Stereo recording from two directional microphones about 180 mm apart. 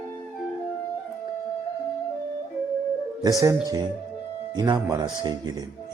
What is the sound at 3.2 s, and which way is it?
Speech, 20° right (ahead or behind).